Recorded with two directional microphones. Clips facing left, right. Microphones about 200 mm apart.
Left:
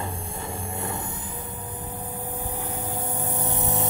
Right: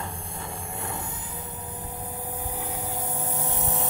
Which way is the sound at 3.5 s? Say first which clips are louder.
Left 4 dB; centre (ahead or behind).